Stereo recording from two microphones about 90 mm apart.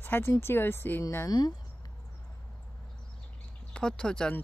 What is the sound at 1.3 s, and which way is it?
Speech, 45° left (ahead or behind).